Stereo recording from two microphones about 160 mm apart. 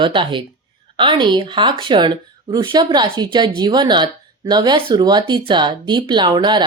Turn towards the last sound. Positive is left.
turn(degrees=-30)  # may be behind; listen again after turning